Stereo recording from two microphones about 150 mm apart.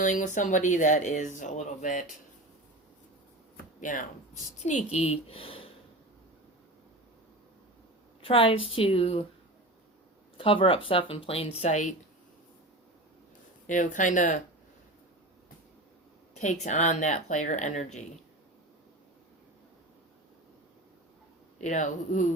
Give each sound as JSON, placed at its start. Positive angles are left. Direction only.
{"t": 0.0, "sound": "speech", "side_deg": 55}
{"t": 3.8, "sound": "speech", "side_deg": 60}
{"t": 8.2, "sound": "a woman's voice", "side_deg": 35}
{"t": 10.3, "sound": "a woman's voice", "side_deg": 35}
{"t": 13.7, "sound": "speech", "side_deg": 60}
{"t": 16.3, "sound": "speech", "side_deg": 50}
{"t": 21.6, "sound": "speech", "side_deg": 55}